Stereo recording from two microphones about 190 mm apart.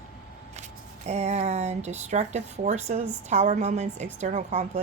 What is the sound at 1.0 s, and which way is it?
Speech, 35° right (ahead or behind).